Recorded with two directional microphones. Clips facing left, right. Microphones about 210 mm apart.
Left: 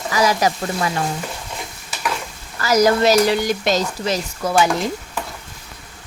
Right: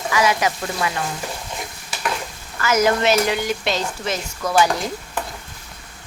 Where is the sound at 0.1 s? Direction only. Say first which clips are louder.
Left 2 dB; 35° left (ahead or behind).